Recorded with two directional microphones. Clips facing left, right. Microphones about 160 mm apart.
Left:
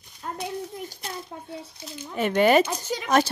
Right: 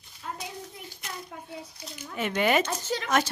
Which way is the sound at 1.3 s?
30° left (ahead or behind).